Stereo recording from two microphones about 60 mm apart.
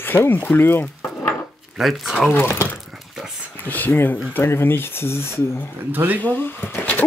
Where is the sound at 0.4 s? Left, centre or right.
Left.